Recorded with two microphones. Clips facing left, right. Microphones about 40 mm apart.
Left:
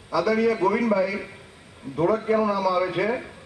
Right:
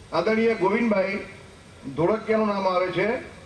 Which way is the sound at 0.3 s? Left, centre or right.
Centre.